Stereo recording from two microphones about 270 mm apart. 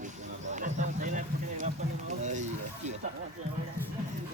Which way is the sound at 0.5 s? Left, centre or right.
Right.